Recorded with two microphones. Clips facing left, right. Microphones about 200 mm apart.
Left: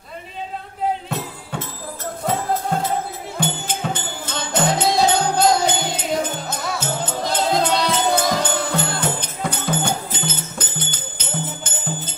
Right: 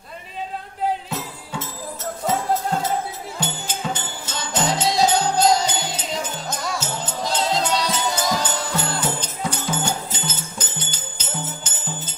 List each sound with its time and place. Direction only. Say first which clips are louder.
3.3 s music: left 6 dB; 60° left (ahead or behind)